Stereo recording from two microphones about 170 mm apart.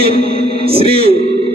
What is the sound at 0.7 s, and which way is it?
Speech, 35° right (ahead or behind).